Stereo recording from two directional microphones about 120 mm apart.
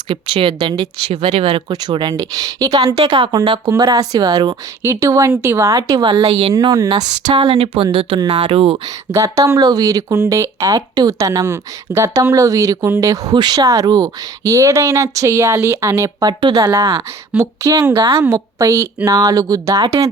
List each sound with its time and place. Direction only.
0.1 s speech: 45° right (ahead or behind)
1.1 s speech: 50° right (ahead or behind)
1.7 s speech: 35° right (ahead or behind)
3.0 s speech: 50° right (ahead or behind)
3.7 s speech: 30° right (ahead or behind)
6.0 s speech: 45° right (ahead or behind)
6.5 s speech: 30° right (ahead or behind)
7.3 s speech: 50° right (ahead or behind)
9.1 s speech: 25° right (ahead or behind)
16.4 s speech: 35° right (ahead or behind)
16.7 s speech: 25° right (ahead or behind)
17.9 s speech: 40° right (ahead or behind)
18.2 s speech: 25° right (ahead or behind)